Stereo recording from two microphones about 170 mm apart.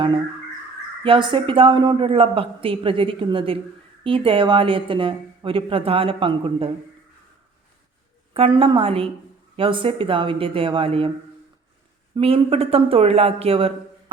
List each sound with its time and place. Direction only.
1.0 s a woman's voice: 30° right (ahead or behind)
8.3 s a woman's voice: 30° right (ahead or behind)
12.1 s a woman's voice: 35° right (ahead or behind)